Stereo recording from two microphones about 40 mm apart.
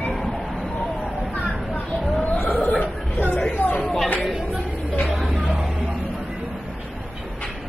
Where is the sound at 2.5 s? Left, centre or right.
Left.